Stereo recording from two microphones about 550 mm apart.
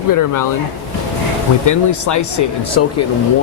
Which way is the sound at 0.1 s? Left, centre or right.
Left.